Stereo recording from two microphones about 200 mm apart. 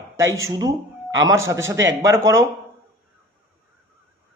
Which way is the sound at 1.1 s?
15° right (ahead or behind).